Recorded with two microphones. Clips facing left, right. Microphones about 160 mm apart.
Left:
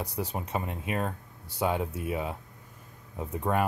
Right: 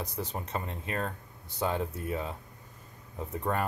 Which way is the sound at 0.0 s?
10° left (ahead or behind).